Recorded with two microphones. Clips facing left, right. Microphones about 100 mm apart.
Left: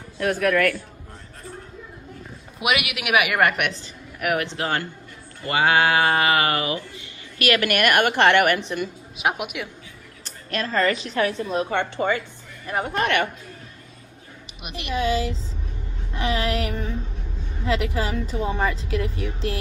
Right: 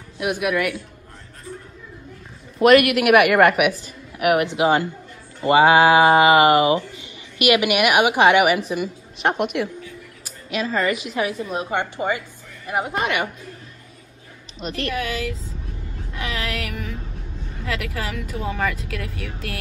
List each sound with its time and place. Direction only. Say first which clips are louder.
0.2 s speech: left 2 dB; 15° right (ahead or behind)
2.6 s a woman's voice: right 11 dB; 5° left (ahead or behind)
4.4 s speech: right 7 dB; 15° right (ahead or behind)
14.6 s speech: even; 15° left (ahead or behind)
16.1 s a sound: left 4 dB; 30° left (ahead or behind)
17.6 s speech: left 4 dB; 25° left (ahead or behind)